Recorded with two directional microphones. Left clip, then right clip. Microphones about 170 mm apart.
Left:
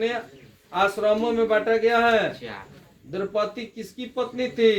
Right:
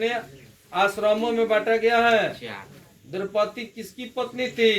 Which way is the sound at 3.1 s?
45° left (ahead or behind).